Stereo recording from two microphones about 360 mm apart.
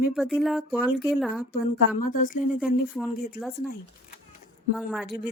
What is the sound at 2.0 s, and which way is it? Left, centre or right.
Speech, left.